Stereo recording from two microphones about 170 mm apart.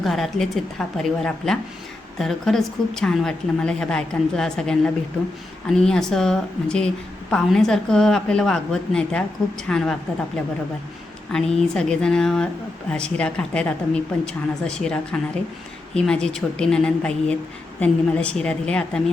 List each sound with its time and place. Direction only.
0.0 s a woman's voice: centre (ahead or behind)
11.3 s a woman's voice: 5° left (ahead or behind)